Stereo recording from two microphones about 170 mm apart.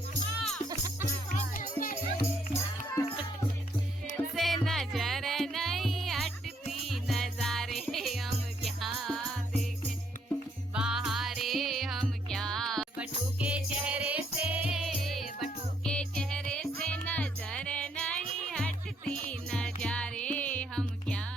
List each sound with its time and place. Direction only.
0.7 s music: 20° right (ahead or behind)
1.5 s music: 55° left (ahead or behind)
4.4 s music: centre (ahead or behind)
10.8 s music: 5° right (ahead or behind)